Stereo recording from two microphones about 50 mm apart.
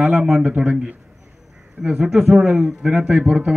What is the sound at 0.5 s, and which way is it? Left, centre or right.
Speech, right.